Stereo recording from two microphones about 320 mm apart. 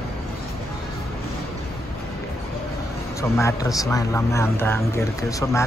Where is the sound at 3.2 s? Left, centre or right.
Centre.